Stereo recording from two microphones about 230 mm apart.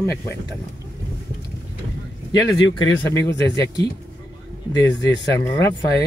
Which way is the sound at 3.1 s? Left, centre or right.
Centre.